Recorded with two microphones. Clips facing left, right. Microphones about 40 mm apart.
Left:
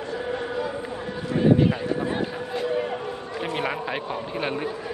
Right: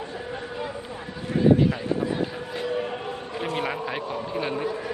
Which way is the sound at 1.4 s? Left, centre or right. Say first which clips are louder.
Even; centre.